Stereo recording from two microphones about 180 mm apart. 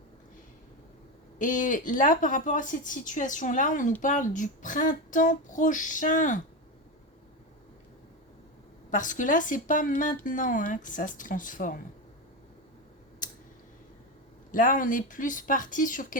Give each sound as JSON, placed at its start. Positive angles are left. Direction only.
{"t": 1.4, "sound": "a woman's voice", "side_deg": 45}
{"t": 8.9, "sound": "a woman's voice", "side_deg": 45}
{"t": 14.5, "sound": "a woman's voice", "side_deg": 45}